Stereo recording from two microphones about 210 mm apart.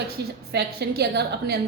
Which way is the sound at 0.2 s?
50° right (ahead or behind).